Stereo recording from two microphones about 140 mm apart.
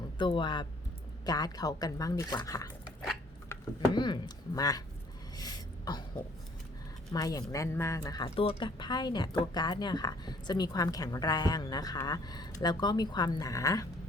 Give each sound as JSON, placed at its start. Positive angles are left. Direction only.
{"t": 0.2, "sound": "speech", "side_deg": 35}
{"t": 3.8, "sound": "speech", "side_deg": 30}
{"t": 5.4, "sound": "throat clearing", "side_deg": 30}
{"t": 7.1, "sound": "speech", "side_deg": 25}
{"t": 8.4, "sound": "speech", "side_deg": 40}